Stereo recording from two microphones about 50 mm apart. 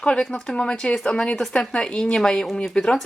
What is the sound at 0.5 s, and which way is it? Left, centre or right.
A woman's voice, centre.